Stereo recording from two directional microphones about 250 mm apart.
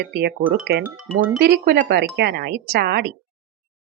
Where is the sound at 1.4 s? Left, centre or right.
Right.